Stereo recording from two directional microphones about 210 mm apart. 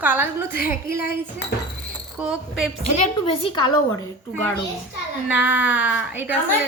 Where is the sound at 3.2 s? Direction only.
25° left (ahead or behind).